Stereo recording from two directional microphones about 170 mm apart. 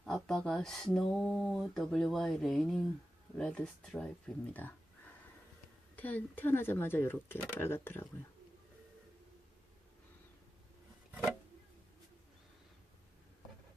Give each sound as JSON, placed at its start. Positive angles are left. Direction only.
{"t": 0.0, "sound": "speech", "side_deg": 0}
{"t": 6.0, "sound": "speech", "side_deg": 10}